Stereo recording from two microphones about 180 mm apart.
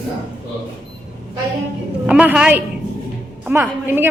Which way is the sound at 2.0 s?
5° right (ahead or behind).